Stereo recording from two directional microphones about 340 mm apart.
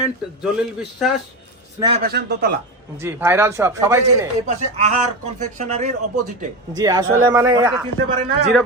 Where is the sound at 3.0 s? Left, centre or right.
Centre.